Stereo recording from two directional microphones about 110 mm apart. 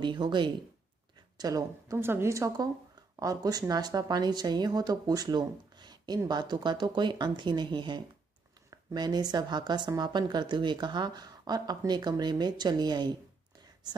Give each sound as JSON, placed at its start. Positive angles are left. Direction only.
{"t": 0.0, "sound": "speech", "side_deg": -45}
{"t": 1.4, "sound": "a woman's voice", "side_deg": -30}